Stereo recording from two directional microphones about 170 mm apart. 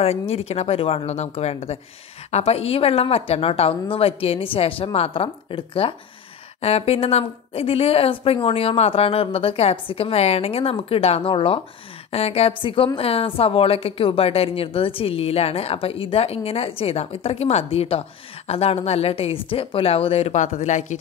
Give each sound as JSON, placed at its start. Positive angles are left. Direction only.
{"t": 0.3, "sound": "a woman's voice", "side_deg": 35}